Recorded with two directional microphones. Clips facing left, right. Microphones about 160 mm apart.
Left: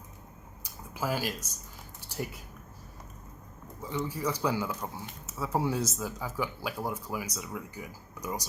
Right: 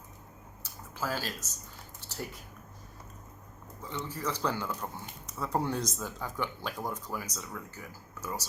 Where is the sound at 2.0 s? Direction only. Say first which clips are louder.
Left 4 dB; 15° left (ahead or behind).